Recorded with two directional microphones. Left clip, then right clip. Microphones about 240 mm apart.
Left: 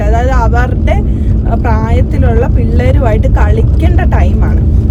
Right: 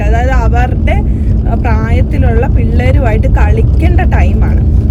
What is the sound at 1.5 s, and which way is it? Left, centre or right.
Speech, left.